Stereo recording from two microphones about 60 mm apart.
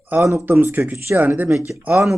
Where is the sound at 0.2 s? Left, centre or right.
Right.